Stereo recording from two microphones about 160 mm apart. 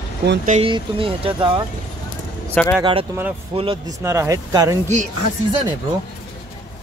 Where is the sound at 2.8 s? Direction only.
35° right (ahead or behind).